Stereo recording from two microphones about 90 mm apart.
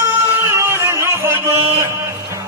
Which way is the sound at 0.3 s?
30° right (ahead or behind).